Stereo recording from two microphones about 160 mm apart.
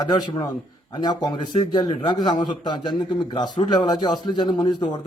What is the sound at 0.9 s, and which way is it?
A man's voice, 30° left (ahead or behind).